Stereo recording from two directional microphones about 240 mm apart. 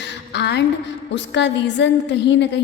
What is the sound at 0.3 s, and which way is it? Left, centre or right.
A woman's voice, left.